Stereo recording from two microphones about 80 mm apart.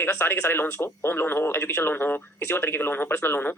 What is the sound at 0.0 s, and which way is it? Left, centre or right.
Speech, left.